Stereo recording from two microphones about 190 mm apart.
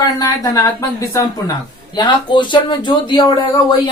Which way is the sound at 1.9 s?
25° left (ahead or behind).